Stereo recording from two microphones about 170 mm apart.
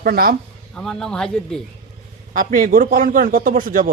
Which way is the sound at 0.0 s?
60° right (ahead or behind).